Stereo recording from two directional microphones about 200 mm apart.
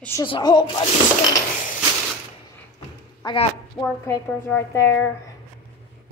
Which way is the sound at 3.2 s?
30° left (ahead or behind).